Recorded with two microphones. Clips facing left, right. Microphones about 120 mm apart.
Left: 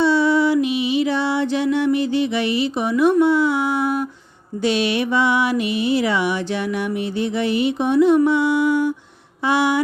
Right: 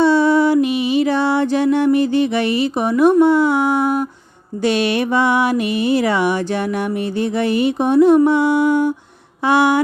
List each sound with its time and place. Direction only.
0.0 s mantra: 50° right (ahead or behind)